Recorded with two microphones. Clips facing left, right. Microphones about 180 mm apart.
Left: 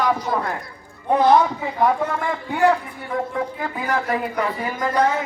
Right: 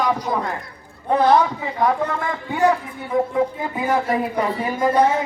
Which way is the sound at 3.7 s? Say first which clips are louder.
Right 3 dB; 20° right (ahead or behind).